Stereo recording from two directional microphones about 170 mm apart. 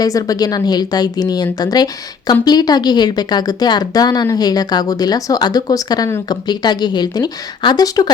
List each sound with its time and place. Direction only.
0.0 s speech: 20° left (ahead or behind)